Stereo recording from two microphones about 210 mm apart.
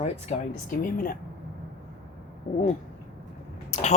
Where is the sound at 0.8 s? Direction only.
40° left (ahead or behind).